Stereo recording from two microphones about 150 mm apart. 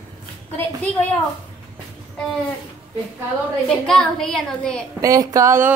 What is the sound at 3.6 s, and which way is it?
A woman's voice, 5° left (ahead or behind).